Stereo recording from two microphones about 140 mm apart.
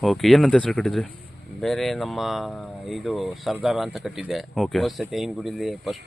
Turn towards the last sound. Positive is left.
turn(degrees=0)  # may be behind; listen again after turning